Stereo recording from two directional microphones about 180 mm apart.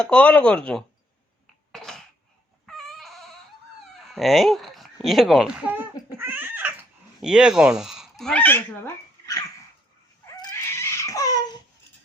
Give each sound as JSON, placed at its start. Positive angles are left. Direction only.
{"t": 0.0, "sound": "speech", "side_deg": 5}
{"t": 1.7, "sound": "throat clearing", "side_deg": 5}
{"t": 2.6, "sound": "chicken", "side_deg": 0}
{"t": 4.0, "sound": "speech", "side_deg": 0}
{"t": 6.1, "sound": "cat", "side_deg": -10}
{"t": 8.2, "sound": "speech", "side_deg": 5}
{"t": 10.3, "sound": "dog", "side_deg": 15}